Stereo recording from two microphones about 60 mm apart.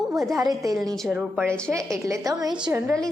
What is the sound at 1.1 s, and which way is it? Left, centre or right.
Speech, centre.